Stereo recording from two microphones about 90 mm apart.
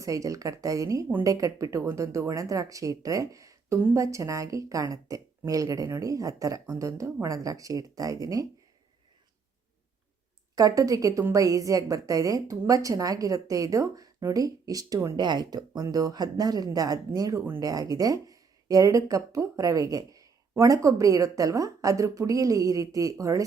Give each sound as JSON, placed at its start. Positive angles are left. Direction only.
{"t": 0.0, "sound": "speech", "side_deg": -40}
{"t": 10.5, "sound": "speech", "side_deg": -40}
{"t": 15.1, "sound": "speech", "side_deg": -55}